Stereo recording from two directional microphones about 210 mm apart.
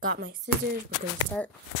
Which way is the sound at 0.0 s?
45° right (ahead or behind).